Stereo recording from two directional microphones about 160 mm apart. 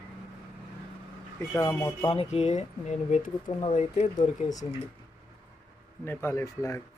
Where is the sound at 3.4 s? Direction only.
35° left (ahead or behind).